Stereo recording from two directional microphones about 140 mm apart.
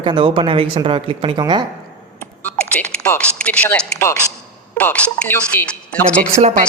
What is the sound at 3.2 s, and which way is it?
Speech, 10° left (ahead or behind).